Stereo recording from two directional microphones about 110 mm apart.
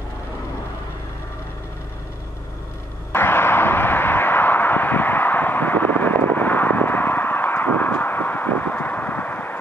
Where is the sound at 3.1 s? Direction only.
20° left (ahead or behind).